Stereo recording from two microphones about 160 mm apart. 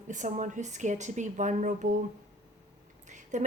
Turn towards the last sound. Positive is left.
turn(degrees=-50)  # may be behind; listen again after turning